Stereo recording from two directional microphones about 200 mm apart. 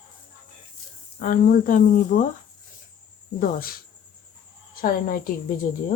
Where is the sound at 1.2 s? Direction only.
45° left (ahead or behind).